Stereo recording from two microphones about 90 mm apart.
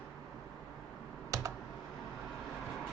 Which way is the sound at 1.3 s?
40° right (ahead or behind).